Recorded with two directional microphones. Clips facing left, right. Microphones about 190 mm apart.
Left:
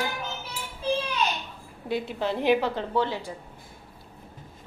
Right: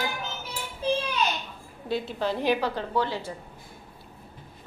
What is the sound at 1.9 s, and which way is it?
A woman's voice, 20° left (ahead or behind).